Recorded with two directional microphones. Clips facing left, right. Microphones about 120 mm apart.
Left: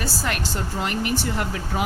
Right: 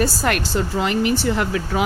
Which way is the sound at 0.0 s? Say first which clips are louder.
Right 7 dB; 60° right (ahead or behind).